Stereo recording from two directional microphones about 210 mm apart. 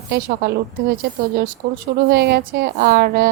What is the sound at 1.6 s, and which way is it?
Speech, 35° right (ahead or behind).